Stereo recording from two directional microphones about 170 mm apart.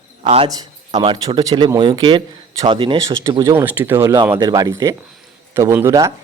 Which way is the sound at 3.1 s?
15° right (ahead or behind).